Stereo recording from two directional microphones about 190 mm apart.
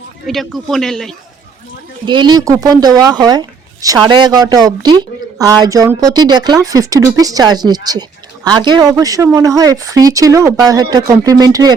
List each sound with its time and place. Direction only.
0.3 s a man's voice: centre (ahead or behind)
2.0 s speech: 25° right (ahead or behind)